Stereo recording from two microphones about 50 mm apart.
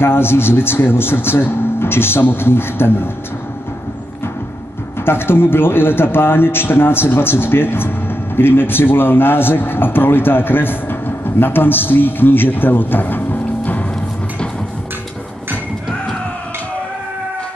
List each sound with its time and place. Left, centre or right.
0.0 s a man's voice: left
5.0 s a man's voice: left